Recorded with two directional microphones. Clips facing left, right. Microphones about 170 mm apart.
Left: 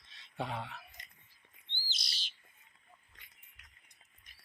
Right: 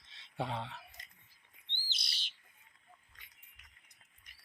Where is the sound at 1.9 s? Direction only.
60° right (ahead or behind).